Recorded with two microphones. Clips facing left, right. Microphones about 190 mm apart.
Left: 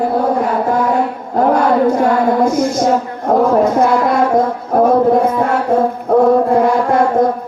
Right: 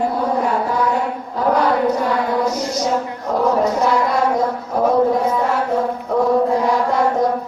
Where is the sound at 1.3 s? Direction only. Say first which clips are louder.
Left 5 dB; 50° left (ahead or behind).